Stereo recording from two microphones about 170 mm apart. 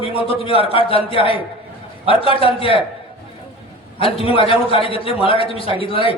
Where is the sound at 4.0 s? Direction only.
35° left (ahead or behind).